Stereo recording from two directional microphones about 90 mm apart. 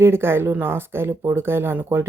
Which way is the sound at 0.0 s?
25° right (ahead or behind).